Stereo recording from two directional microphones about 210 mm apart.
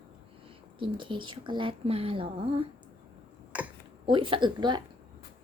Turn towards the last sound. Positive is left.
turn(degrees=-20)  # may be behind; listen again after turning